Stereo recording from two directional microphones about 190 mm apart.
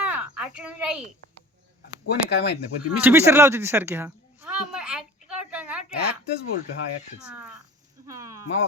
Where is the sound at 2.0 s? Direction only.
60° left (ahead or behind).